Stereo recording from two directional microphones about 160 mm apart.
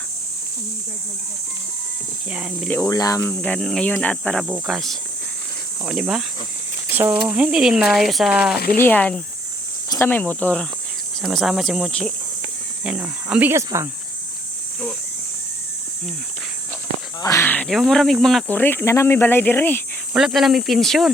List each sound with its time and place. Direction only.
2.3 s speech: 5° right (ahead or behind)
2.6 s speech: 10° left (ahead or behind)
3.3 s speech: 5° left (ahead or behind)
6.9 s speech: 15° right (ahead or behind)
8.8 s speech: 10° left (ahead or behind)
12.8 s speech: 10° right (ahead or behind)
17.2 s speech: 15° left (ahead or behind)
20.1 s speech: centre (ahead or behind)